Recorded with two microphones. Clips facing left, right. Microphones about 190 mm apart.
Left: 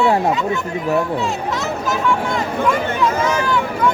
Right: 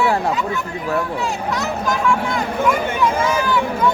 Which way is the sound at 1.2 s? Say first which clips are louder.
Left 1 dB; centre (ahead or behind).